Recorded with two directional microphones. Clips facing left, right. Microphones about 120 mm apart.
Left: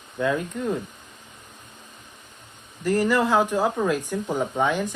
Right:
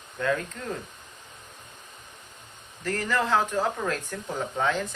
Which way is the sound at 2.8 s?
10° left (ahead or behind).